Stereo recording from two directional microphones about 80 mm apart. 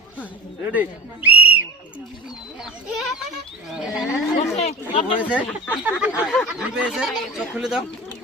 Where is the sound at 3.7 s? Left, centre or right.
Centre.